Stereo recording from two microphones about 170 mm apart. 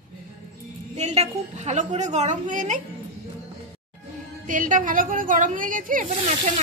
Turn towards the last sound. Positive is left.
turn(degrees=-50)  # may be behind; listen again after turning